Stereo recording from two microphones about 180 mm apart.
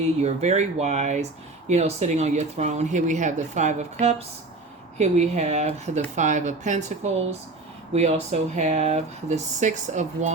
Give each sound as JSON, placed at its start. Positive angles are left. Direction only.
{"t": 0.0, "sound": "speech", "side_deg": -40}